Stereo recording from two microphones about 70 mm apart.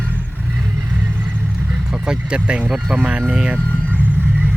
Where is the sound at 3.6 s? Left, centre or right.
Left.